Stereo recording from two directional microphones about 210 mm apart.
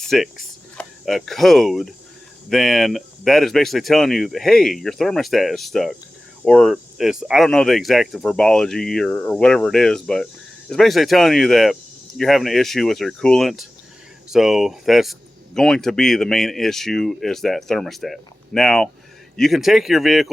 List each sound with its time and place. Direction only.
0.0 s speech: centre (ahead or behind)